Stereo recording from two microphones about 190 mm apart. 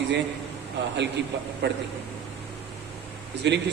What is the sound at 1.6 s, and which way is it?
Speech, 65° right (ahead or behind).